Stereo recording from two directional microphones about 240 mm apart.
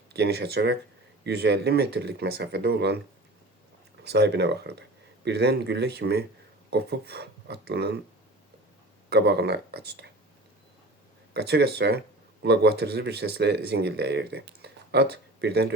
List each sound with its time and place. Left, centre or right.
0.1 s speech: right
4.0 s speech: right
9.0 s speech: right
11.3 s speech: right